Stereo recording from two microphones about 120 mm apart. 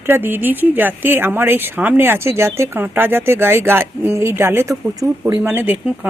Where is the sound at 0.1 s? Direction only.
15° right (ahead or behind).